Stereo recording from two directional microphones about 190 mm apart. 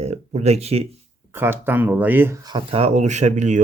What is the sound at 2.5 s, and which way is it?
Speech, 30° right (ahead or behind).